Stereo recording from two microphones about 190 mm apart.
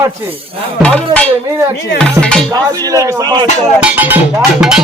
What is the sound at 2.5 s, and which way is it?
Speech, 20° right (ahead or behind).